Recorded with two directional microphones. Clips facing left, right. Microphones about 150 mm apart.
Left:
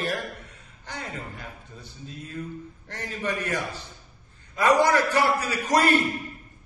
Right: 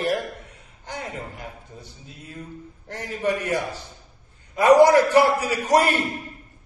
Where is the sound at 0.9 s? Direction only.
15° right (ahead or behind).